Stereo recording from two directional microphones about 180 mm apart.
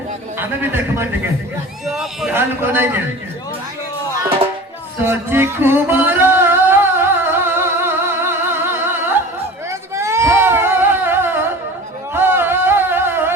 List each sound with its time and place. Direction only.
0.3 s speech: 10° right (ahead or behind)
1.9 s speech: centre (ahead or behind)
2.3 s speech: 10° right (ahead or behind)
4.9 s music: 15° right (ahead or behind)
9.9 s a sound: 15° right (ahead or behind)